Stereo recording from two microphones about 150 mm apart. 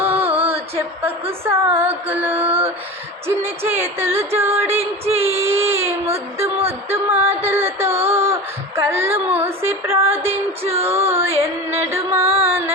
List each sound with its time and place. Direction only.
0.0 s music: 15° right (ahead or behind)
1.5 s a woman's voice: 15° right (ahead or behind)
4.8 s music: 40° right (ahead or behind)
5.4 s crying: 15° right (ahead or behind)
6.4 s a woman's voice: 15° right (ahead or behind)